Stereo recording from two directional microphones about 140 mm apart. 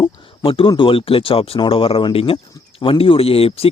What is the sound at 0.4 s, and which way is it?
Speech, 40° left (ahead or behind).